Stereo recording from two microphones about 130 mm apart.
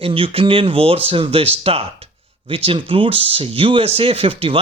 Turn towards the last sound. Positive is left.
turn(degrees=-45)  # may be behind; listen again after turning